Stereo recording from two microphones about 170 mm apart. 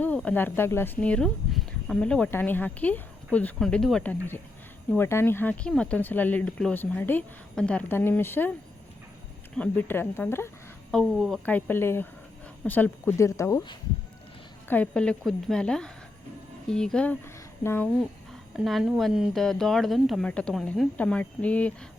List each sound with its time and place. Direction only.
0.0 s speech: 10° left (ahead or behind)
9.6 s speech: 10° left (ahead or behind)
10.9 s speech: 5° left (ahead or behind); by 13.7 s 20° left (ahead or behind)
14.7 s speech: 5° left (ahead or behind)
18.5 s speech: centre (ahead or behind)